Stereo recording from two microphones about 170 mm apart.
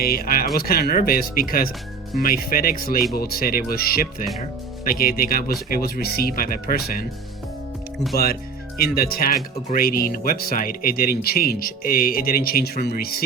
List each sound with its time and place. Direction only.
0.0 s speech: 60° left (ahead or behind)
8.1 s speech: 65° left (ahead or behind)